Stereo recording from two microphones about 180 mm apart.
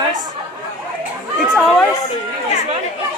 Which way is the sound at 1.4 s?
Centre (ahead or behind).